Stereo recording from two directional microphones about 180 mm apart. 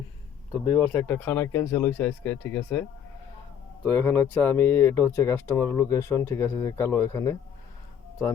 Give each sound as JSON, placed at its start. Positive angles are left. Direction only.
{"t": 0.5, "sound": "speech", "side_deg": 20}
{"t": 3.8, "sound": "speech", "side_deg": 10}